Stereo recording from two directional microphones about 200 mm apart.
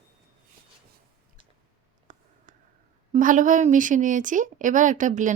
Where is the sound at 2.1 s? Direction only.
40° right (ahead or behind).